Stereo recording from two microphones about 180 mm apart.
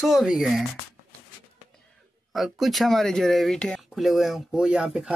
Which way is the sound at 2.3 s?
Centre (ahead or behind).